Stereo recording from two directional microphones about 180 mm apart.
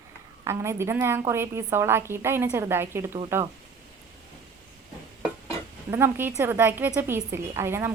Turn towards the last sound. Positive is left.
turn(degrees=-15)  # may be behind; listen again after turning